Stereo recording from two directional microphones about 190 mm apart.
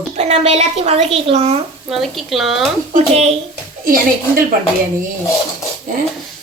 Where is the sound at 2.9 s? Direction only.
35° right (ahead or behind).